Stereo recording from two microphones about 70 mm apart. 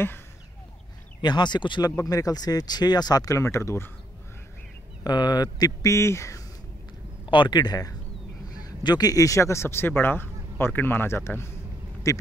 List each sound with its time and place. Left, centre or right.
1.2 s speech: left
2.0 s speech: left
3.3 s speech: left
5.0 s speech: left
5.9 s speech: left
7.4 s speech: left
12.1 s speech: left